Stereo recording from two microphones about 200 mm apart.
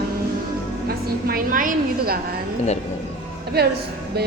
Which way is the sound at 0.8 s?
45° right (ahead or behind).